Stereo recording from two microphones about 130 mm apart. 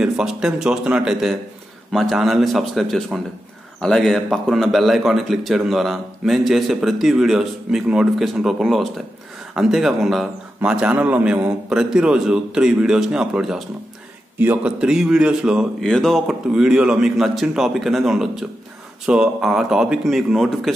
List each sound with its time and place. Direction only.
0.0 s a man's voice: 5° right (ahead or behind)